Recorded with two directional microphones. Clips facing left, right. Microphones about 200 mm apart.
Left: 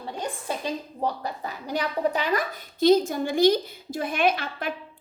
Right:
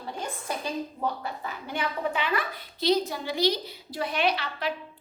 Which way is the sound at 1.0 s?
40° left (ahead or behind).